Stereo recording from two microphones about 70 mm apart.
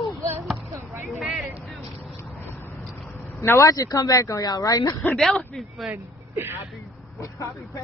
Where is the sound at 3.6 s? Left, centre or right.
Left.